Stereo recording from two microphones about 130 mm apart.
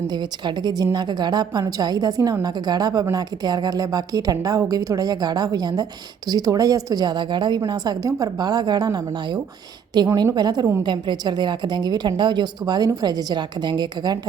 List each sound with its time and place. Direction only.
0.1 s a woman's voice: 35° right (ahead or behind)